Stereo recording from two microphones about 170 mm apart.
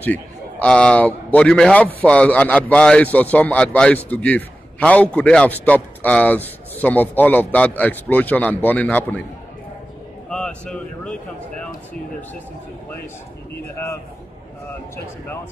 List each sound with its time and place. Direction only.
0.0 s a man's voice: 10° left (ahead or behind)
10.3 s speech: 5° left (ahead or behind)